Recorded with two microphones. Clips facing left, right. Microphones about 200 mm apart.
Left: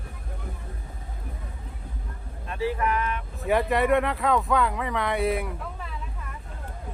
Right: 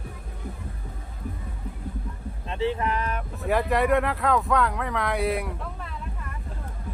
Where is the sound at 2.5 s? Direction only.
25° right (ahead or behind).